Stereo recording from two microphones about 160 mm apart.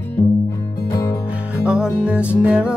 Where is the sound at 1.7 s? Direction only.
5° right (ahead or behind).